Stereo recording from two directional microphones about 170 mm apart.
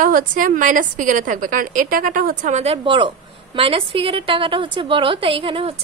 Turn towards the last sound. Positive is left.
turn(degrees=-30)  # may be behind; listen again after turning